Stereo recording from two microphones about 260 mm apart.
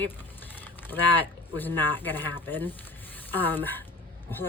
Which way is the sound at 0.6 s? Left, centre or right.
Centre.